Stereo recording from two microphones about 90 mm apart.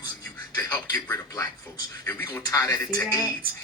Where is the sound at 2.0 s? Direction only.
40° left (ahead or behind).